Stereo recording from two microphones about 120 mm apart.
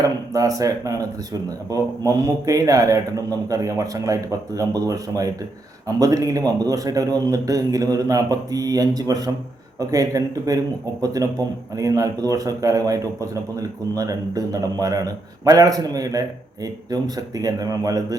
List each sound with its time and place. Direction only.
0.0 s a man's voice: 30° right (ahead or behind)